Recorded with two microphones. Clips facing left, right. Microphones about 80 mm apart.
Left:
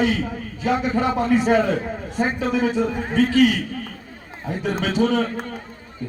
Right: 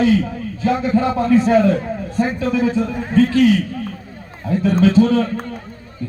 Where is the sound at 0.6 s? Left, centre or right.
Centre.